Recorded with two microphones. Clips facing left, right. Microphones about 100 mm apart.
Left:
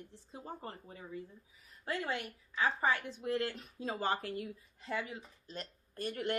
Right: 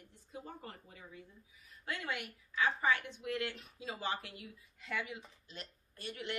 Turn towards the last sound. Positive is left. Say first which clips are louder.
# left 7 dB
turn(degrees=45)  # may be behind; listen again after turning